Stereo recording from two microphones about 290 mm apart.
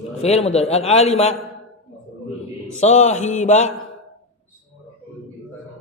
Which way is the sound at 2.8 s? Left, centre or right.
Left.